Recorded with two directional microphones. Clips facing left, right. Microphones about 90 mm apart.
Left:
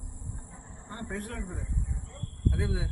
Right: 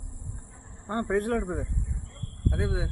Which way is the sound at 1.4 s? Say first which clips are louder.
Right 9 dB; 85° right.